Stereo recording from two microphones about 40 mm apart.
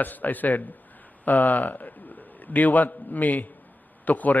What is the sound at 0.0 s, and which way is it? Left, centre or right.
A man's voice, left.